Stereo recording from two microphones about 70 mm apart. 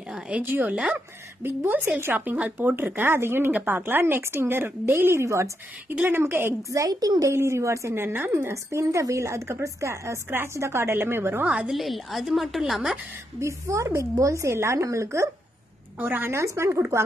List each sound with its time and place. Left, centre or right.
0.3 s a woman's voice: right
3.5 s a woman's voice: right
5.9 s a woman's voice: right
6.7 s a woman's voice: right
7.3 s a woman's voice: right
8.7 s a woman's voice: right
11.4 s a woman's voice: centre
11.7 s a woman's voice: centre
13.4 s speech: right
16.0 s a woman's voice: right